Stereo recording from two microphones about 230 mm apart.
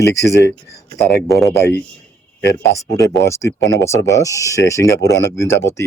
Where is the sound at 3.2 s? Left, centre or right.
Centre.